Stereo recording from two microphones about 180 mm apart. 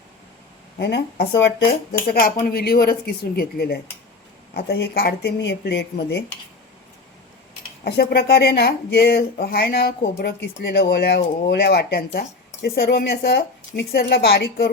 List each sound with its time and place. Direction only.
0.8 s speech: 75° left (ahead or behind)
2.0 s speech: 50° left (ahead or behind)
7.9 s speech: 60° left (ahead or behind)